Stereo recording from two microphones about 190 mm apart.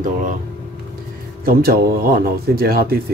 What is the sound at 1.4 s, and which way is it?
Speech, 50° right (ahead or behind).